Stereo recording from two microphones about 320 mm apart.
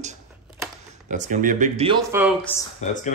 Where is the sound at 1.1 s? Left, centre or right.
Right; by 2.3 s centre.